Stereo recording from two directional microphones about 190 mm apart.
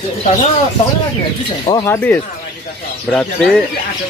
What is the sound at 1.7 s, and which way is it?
Speech, 20° left (ahead or behind).